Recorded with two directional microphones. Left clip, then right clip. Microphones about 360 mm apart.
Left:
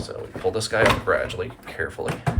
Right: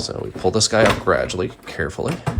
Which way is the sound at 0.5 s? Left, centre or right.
Centre.